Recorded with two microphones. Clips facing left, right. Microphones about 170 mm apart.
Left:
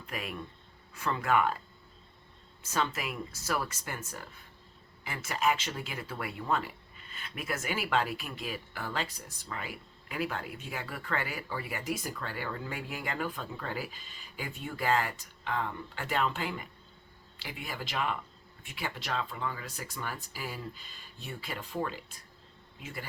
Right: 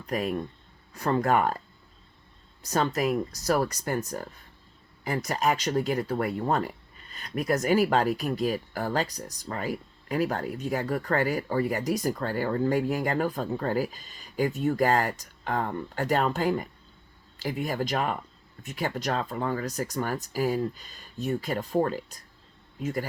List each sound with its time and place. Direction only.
0.0 s speech: 40° right (ahead or behind)
2.6 s speech: 40° right (ahead or behind)